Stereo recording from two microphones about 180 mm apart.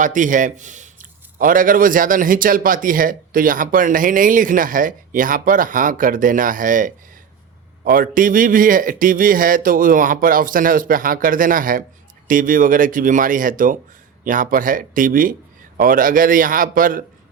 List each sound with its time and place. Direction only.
0.0 s a man's voice: 45° right (ahead or behind)